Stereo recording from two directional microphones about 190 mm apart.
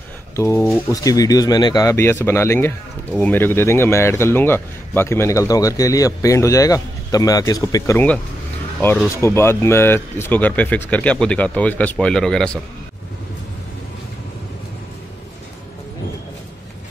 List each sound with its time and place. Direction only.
0.4 s speech: 15° left (ahead or behind)